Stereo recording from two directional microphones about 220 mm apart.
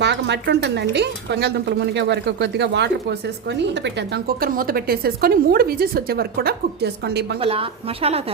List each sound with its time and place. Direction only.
0.0 s a woman's voice: 50° right (ahead or behind)
7.3 s a woman's voice: 25° right (ahead or behind)